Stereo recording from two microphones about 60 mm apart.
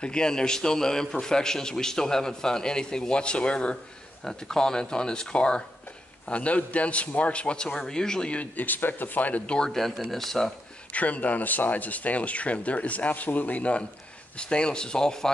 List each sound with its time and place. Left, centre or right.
0.0 s a man's voice: centre
9.6 s speech: centre
10.9 s a man's voice: left